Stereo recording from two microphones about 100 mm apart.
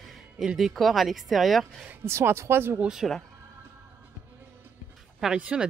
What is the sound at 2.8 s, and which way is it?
Speech, 5° right (ahead or behind).